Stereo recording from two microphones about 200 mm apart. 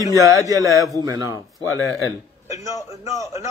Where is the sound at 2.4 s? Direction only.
15° right (ahead or behind).